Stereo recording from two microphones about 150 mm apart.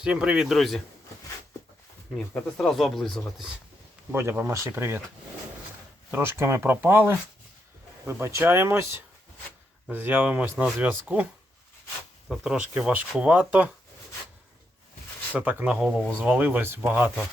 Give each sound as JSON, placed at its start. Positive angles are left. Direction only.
{"t": 0.0, "sound": "speech", "side_deg": -5}
{"t": 2.1, "sound": "speech", "side_deg": 5}
{"t": 4.1, "sound": "speech", "side_deg": -15}
{"t": 6.1, "sound": "speech", "side_deg": -15}
{"t": 12.3, "sound": "speech", "side_deg": -5}
{"t": 15.4, "sound": "speech", "side_deg": -10}